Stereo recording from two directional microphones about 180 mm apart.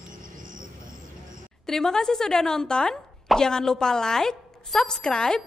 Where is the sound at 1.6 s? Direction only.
5° left (ahead or behind).